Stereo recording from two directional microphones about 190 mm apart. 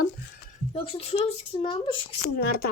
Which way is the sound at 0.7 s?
30° left (ahead or behind).